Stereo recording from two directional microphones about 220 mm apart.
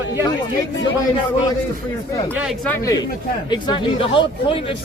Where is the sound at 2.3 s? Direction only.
5° right (ahead or behind).